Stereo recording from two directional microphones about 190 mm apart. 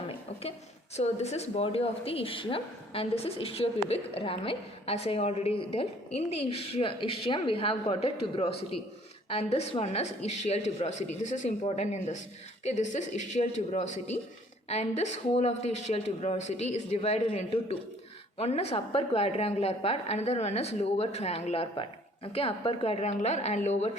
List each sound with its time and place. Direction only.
0.9 s a woman's voice: 35° left (ahead or behind)